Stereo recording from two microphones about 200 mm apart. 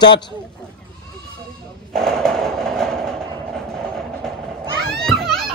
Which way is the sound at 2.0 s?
5° left (ahead or behind).